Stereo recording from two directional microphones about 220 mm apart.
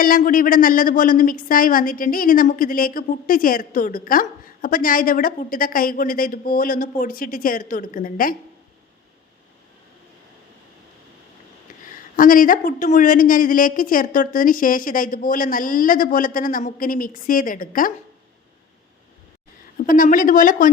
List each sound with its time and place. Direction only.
0.0 s a woman's voice: 40° left (ahead or behind)
11.7 s a sound: 40° left (ahead or behind)
12.1 s a woman's voice: 40° left (ahead or behind)
19.9 s a woman's voice: 35° left (ahead or behind)